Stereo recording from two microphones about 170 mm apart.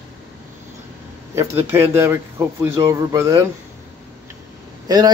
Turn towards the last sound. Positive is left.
turn(degrees=-25)  # may be behind; listen again after turning